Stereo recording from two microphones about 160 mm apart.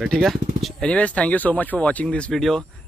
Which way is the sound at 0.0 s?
Centre (ahead or behind).